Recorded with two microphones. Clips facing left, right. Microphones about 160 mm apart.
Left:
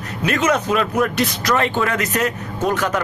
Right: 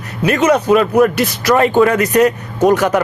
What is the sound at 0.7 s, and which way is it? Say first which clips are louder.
Speech: right 8 dB; 50° right (ahead or behind).